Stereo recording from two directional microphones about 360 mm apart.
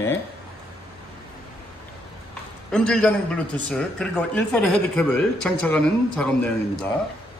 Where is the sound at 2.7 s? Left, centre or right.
Centre.